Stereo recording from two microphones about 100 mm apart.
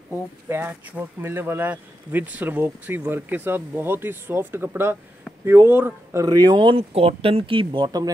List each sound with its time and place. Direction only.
0.5 s speech: 20° right (ahead or behind)
6.2 s speech: 40° right (ahead or behind)
6.8 s speech: 75° right (ahead or behind); by 8.1 s 45° right (ahead or behind)